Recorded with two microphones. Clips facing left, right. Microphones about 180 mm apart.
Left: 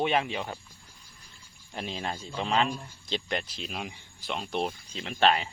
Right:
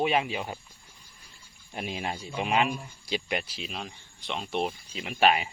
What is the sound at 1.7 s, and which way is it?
Speech, 10° right (ahead or behind).